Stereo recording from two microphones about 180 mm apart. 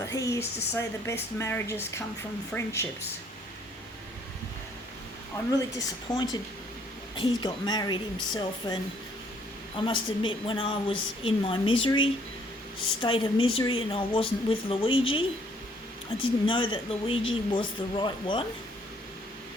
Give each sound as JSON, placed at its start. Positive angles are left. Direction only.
{"t": 0.0, "sound": "speech", "side_deg": 20}
{"t": 5.5, "sound": "a woman's voice", "side_deg": 20}
{"t": 16.5, "sound": "a woman's voice", "side_deg": 30}